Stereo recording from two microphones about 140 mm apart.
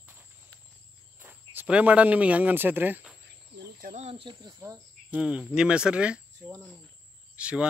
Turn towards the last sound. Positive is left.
turn(degrees=-10)  # may be behind; listen again after turning